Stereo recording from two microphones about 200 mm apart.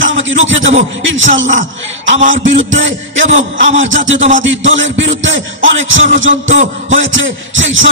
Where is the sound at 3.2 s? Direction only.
35° right (ahead or behind).